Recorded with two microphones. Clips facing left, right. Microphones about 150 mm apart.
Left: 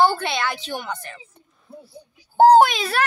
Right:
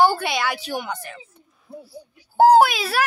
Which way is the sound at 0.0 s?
10° right (ahead or behind).